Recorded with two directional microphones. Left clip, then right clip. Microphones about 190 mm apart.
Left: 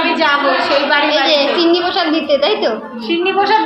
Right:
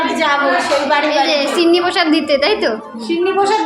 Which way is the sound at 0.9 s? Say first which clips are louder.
Left 1 dB; 35° right (ahead or behind).